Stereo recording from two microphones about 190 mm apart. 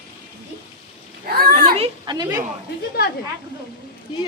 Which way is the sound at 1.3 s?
55° right (ahead or behind).